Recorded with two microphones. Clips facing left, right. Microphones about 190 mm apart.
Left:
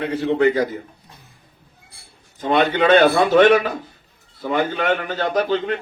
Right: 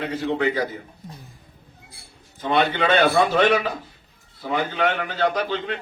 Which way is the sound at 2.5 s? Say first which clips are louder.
Left 5 dB; 45° left (ahead or behind).